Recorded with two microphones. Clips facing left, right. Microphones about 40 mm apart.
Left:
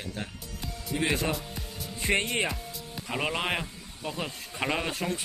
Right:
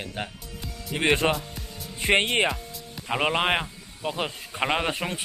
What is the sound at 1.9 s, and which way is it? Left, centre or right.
Speech, right.